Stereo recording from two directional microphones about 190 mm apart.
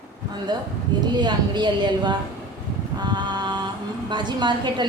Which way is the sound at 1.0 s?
20° right (ahead or behind).